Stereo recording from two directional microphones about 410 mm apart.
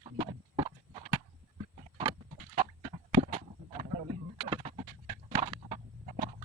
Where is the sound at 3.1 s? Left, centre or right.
Centre.